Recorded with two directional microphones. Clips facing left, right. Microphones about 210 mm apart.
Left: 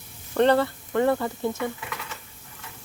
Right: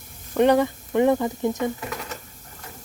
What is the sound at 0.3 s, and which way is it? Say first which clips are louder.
Speech: right 2 dB; 15° right (ahead or behind).